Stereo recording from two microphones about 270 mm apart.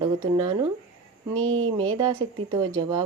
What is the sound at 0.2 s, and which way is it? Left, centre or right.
Speech, centre.